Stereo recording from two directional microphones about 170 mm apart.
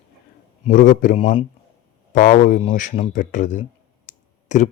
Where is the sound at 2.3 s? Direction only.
45° left (ahead or behind).